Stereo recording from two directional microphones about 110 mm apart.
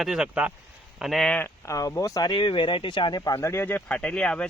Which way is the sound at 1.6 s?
30° left (ahead or behind).